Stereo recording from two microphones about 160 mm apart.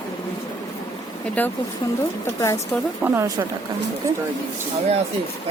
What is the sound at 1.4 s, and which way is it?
Speech, 10° left (ahead or behind).